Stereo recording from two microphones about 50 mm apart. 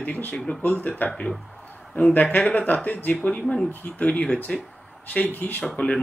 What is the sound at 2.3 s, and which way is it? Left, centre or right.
Speech, left.